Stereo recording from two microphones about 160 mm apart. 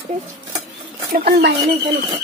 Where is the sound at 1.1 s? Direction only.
70° right (ahead or behind).